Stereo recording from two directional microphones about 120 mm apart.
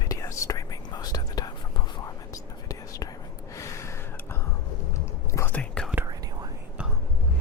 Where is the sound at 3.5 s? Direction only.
25° left (ahead or behind).